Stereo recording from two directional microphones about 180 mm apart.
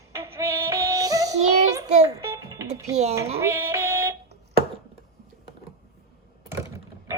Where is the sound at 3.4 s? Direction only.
15° right (ahead or behind).